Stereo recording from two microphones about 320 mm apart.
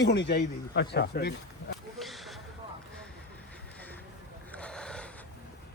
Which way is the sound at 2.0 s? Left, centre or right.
Centre.